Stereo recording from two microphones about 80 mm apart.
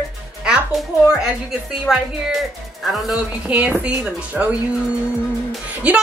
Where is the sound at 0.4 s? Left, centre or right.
Centre.